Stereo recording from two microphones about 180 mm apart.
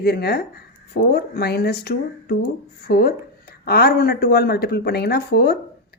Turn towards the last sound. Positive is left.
turn(degrees=60)  # may be behind; listen again after turning